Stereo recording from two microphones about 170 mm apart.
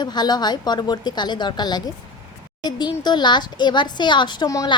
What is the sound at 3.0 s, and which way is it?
A woman's voice, 25° left (ahead or behind).